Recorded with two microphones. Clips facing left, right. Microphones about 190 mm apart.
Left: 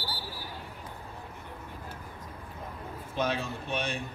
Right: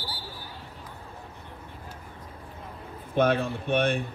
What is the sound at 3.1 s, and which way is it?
Speech, 55° right (ahead or behind).